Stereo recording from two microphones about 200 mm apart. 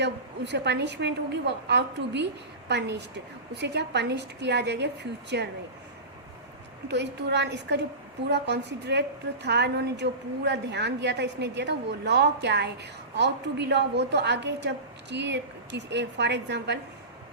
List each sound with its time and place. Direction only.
0.0 s a woman's voice: 60° right (ahead or behind)
6.8 s a woman's voice: 60° right (ahead or behind)